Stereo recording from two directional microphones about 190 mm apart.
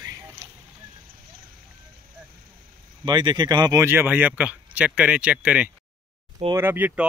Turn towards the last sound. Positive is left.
turn(degrees=-10)  # may be behind; listen again after turning